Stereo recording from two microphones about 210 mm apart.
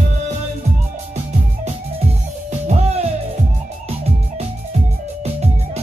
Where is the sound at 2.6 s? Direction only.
30° right (ahead or behind).